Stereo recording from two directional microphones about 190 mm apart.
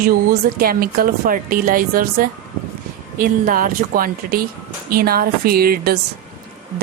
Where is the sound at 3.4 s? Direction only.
45° right (ahead or behind).